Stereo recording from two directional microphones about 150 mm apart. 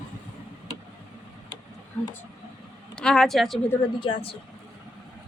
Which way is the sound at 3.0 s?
5° left (ahead or behind).